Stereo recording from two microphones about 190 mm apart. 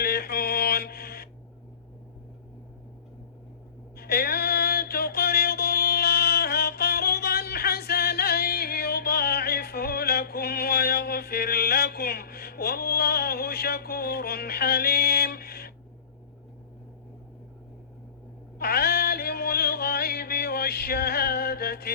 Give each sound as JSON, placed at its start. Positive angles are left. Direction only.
{"t": 0.0, "sound": "mantra", "side_deg": 55}
{"t": 3.9, "sound": "a sound", "side_deg": 55}
{"t": 18.6, "sound": "music", "side_deg": 55}